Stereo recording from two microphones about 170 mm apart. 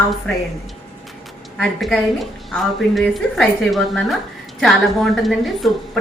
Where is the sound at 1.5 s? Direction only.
Centre (ahead or behind).